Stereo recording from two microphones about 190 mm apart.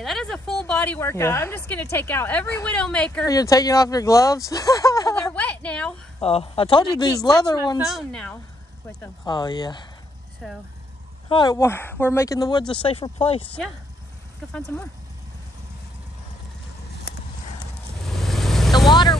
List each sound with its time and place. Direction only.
0.0 s speech: centre (ahead or behind)
3.3 s speech: 20° left (ahead or behind)
5.3 s a sound: 5° left (ahead or behind)
6.2 s speech: 30° left (ahead or behind)
7.8 s speech: centre (ahead or behind)
9.0 s speech: 20° left (ahead or behind)
10.4 s speech: centre (ahead or behind)
11.2 s speech: 25° left (ahead or behind)
11.5 s speech: 15° left (ahead or behind); by 13.6 s 30° left (ahead or behind)
14.5 s speech: 10° left (ahead or behind)
18.1 s vehicle: centre (ahead or behind)
18.9 s speech: 20° left (ahead or behind)